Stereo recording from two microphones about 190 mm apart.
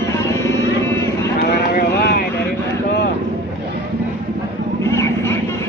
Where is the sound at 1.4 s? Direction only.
55° left (ahead or behind).